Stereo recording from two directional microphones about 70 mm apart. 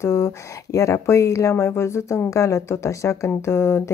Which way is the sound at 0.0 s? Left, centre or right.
Left.